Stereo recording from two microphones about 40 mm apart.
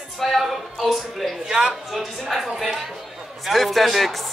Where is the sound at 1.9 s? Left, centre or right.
Centre.